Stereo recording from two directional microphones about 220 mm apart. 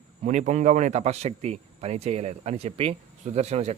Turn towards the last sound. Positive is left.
turn(degrees=-30)  # may be behind; listen again after turning